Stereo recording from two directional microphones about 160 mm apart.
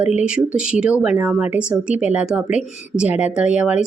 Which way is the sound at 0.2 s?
5° right (ahead or behind).